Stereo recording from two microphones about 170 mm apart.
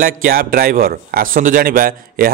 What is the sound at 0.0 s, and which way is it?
A man's voice, 60° right (ahead or behind).